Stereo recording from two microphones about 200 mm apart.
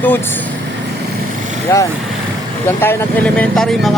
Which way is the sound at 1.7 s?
15° left (ahead or behind).